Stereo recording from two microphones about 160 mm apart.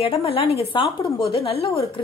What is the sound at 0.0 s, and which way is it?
A woman's voice, 35° left (ahead or behind).